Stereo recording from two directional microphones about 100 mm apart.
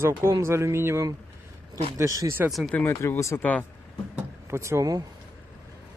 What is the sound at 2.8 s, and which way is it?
Speech, 25° left (ahead or behind).